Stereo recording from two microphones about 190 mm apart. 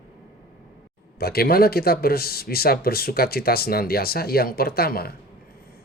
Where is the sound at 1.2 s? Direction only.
55° left (ahead or behind).